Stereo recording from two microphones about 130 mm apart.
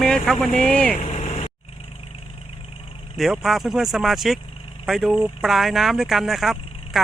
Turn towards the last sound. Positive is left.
turn(degrees=0)  # may be behind; listen again after turning